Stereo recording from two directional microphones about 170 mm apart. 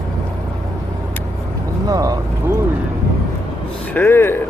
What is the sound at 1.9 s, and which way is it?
Vehicle, 20° right (ahead or behind).